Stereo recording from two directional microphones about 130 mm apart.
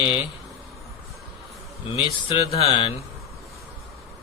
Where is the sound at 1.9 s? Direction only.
40° left (ahead or behind).